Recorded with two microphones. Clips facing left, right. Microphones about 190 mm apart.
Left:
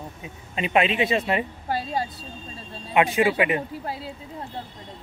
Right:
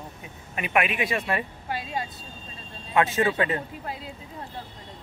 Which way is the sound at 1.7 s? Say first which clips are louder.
Left 5 dB; 40° left (ahead or behind).